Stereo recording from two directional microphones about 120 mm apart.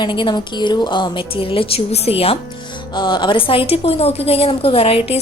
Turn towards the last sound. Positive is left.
turn(degrees=55)  # may be behind; listen again after turning